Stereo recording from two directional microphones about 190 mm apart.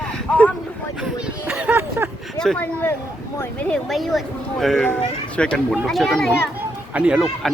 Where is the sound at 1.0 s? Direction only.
5° right (ahead or behind).